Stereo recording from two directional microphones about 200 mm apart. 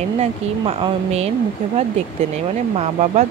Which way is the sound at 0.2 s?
30° right (ahead or behind).